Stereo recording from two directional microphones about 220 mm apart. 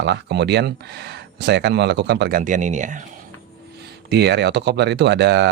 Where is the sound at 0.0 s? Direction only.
50° right (ahead or behind).